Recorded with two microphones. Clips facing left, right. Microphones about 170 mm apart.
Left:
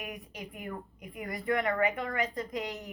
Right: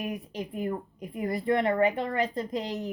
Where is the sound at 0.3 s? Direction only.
35° right (ahead or behind).